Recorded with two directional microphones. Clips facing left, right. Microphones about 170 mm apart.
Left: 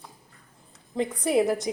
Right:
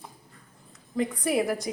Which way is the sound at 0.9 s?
25° left (ahead or behind).